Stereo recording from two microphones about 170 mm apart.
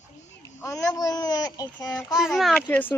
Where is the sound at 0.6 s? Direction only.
20° left (ahead or behind).